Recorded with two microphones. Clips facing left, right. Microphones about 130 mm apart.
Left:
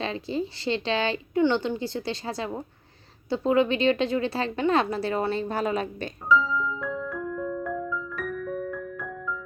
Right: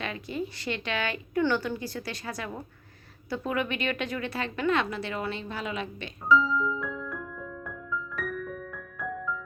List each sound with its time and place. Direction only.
0.0 s a woman's voice: 30° left (ahead or behind)
6.3 s music: centre (ahead or behind)